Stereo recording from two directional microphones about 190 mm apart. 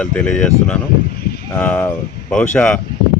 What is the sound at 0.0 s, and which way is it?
Speech, 5° left (ahead or behind).